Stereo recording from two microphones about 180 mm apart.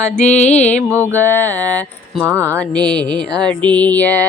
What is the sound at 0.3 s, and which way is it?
Music, 40° left (ahead or behind).